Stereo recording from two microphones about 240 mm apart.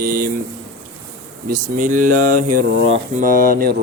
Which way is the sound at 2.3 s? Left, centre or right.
Right.